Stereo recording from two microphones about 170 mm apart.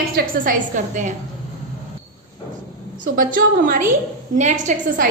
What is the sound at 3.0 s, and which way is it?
A woman's voice, 55° right (ahead or behind).